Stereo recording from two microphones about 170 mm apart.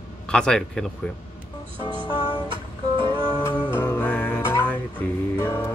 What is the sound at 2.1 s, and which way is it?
Music, 25° left (ahead or behind).